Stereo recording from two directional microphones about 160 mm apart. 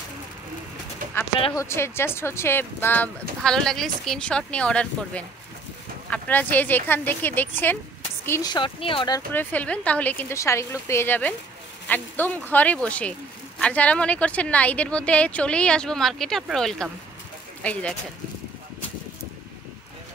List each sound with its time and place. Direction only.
1.5 s speech: 20° left (ahead or behind)
8.3 s speech: 25° left (ahead or behind)
9.3 s speech: 10° left (ahead or behind)